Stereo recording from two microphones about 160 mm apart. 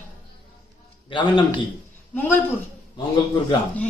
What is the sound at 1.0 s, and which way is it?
Speech, 30° left (ahead or behind).